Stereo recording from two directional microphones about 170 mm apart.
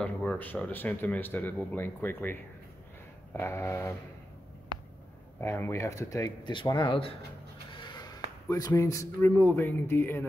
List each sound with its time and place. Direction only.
0.0 s speech: 5° left (ahead or behind)
3.3 s speech: 15° left (ahead or behind)
5.4 s speech: 15° left (ahead or behind); by 7.2 s 30° left (ahead or behind)
7.8 s a sound: 25° left (ahead or behind)
8.5 s speech: 20° left (ahead or behind)